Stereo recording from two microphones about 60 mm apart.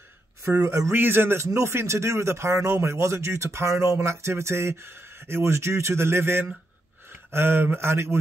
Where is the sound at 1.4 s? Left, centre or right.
Right.